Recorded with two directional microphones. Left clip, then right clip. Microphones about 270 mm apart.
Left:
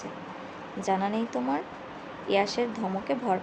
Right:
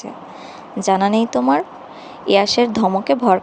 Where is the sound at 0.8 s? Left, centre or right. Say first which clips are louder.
Right 12 dB; right.